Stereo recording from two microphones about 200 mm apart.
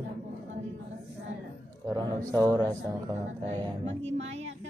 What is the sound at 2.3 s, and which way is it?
Speech, 15° right (ahead or behind).